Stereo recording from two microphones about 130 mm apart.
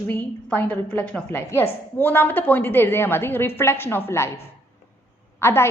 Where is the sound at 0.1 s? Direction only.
10° left (ahead or behind).